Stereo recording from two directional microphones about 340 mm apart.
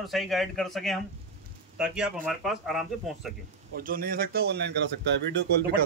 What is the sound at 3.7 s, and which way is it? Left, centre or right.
Speech, right.